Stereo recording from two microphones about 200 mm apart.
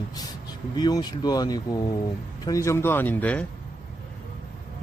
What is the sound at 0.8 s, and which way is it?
Speech, 20° left (ahead or behind).